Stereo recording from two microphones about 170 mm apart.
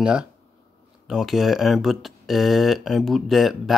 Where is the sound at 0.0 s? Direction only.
5° right (ahead or behind).